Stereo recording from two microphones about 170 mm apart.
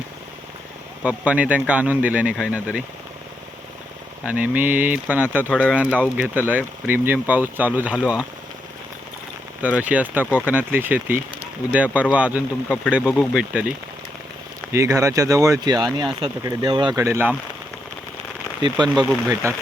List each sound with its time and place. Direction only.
1.0 s speech: 10° right (ahead or behind)
4.3 s speech: 10° right (ahead or behind)
5.5 s speech: 10° left (ahead or behind)
5.7 s speech: 10° right (ahead or behind)
9.6 s speech: 10° right (ahead or behind)
14.7 s speech: 20° right (ahead or behind)
17.0 s speech: 15° right (ahead or behind)
18.6 s speech: 25° right (ahead or behind)